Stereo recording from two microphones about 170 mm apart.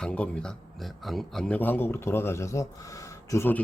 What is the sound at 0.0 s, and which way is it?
A man's voice, 5° left (ahead or behind).